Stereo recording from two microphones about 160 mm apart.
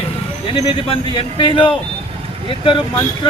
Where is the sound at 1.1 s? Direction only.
30° left (ahead or behind).